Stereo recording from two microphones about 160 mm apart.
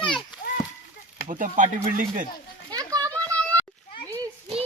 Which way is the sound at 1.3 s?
55° right (ahead or behind).